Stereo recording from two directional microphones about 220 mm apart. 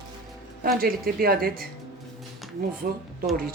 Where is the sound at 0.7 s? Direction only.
45° right (ahead or behind).